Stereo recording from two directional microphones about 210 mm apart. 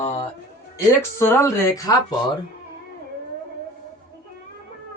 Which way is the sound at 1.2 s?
15° left (ahead or behind).